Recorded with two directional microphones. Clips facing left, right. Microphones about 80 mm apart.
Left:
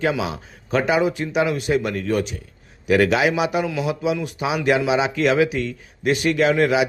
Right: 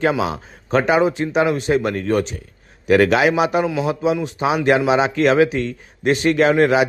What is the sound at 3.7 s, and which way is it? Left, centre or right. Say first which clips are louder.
A man's voice: right 3 dB; right.